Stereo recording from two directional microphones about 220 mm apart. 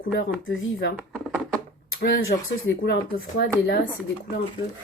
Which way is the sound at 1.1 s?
5° left (ahead or behind).